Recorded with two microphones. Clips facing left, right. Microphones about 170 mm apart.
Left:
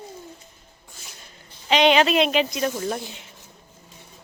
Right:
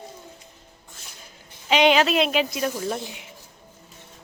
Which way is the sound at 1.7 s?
5° right (ahead or behind).